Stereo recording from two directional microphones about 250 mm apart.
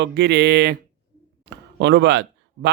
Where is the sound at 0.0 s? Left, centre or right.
Right.